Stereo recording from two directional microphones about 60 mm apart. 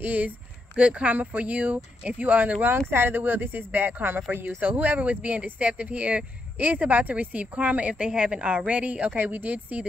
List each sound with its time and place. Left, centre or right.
0.0 s speech: right
2.9 s speech: right